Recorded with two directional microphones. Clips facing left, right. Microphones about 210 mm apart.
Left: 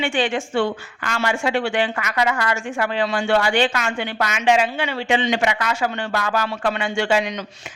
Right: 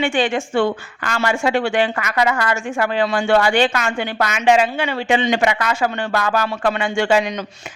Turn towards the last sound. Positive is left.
turn(degrees=-50)  # may be behind; listen again after turning